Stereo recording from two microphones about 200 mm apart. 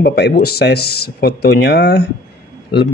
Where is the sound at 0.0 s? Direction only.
55° left (ahead or behind).